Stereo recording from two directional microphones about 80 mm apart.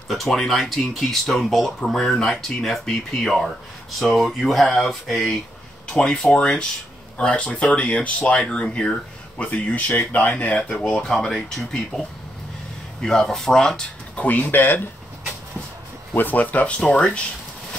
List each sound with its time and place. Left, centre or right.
0.1 s speech: centre; by 14.8 s left
16.2 s speech: left